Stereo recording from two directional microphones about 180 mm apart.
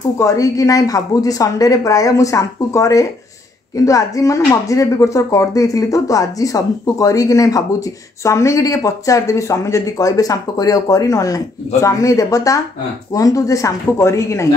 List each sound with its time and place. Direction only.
0.2 s speech: 20° left (ahead or behind)